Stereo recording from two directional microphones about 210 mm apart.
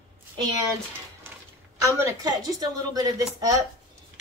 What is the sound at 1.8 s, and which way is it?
A woman's voice, 15° right (ahead or behind).